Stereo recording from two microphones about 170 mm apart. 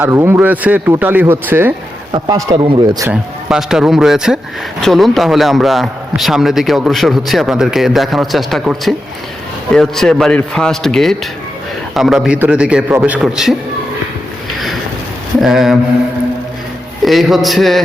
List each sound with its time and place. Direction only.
0.0 s speech: 15° right (ahead or behind)
2.1 s speech: 25° right (ahead or behind)
3.1 s a man's voice: 5° right (ahead or behind)
15.4 s a man's voice: centre (ahead or behind)
17.0 s a man's voice: centre (ahead or behind)